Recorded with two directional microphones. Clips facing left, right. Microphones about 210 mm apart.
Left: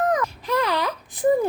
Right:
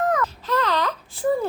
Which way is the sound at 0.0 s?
15° left (ahead or behind).